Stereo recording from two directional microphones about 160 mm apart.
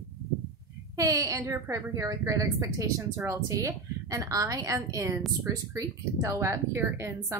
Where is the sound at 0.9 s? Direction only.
20° right (ahead or behind).